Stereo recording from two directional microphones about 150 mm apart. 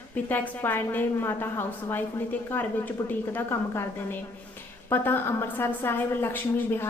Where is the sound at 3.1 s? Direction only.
10° left (ahead or behind).